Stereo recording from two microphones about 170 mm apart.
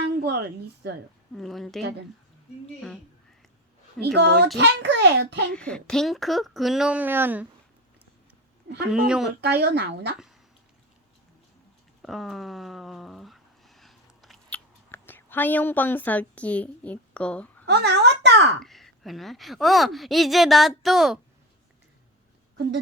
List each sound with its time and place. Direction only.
0.2 s a sound: 75° right (ahead or behind)
1.3 s a woman's voice: centre (ahead or behind)
4.0 s a child's voice: 80° right
4.5 s a child's voice: 90° right
5.5 s a woman's voice: 5° left (ahead or behind); by 7.4 s 10° right (ahead or behind)
8.9 s a woman's voice: 5° right (ahead or behind)
9.4 s speech: 75° right (ahead or behind)
12.0 s a sound: centre (ahead or behind)
14.8 s a woman's voice: 15° left (ahead or behind)
17.7 s a sound: 80° right
18.6 s a woman's voice: centre (ahead or behind)